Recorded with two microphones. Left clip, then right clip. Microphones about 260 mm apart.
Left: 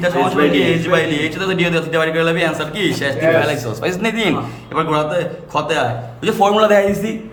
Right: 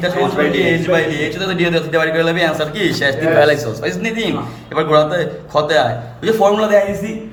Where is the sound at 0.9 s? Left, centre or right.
Centre.